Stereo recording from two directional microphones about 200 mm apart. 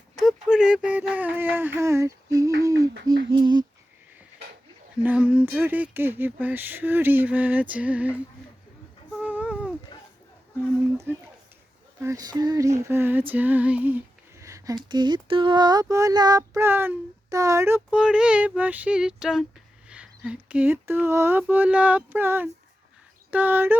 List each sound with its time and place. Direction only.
0.2 s speech: 5° right (ahead or behind)
2.6 s female singing: 15° right (ahead or behind)
3.2 s a sound: 25° right (ahead or behind)
5.0 s female singing: 5° right (ahead or behind)
9.2 s a sound: 5° right (ahead or behind)
10.9 s female singing: 10° right (ahead or behind)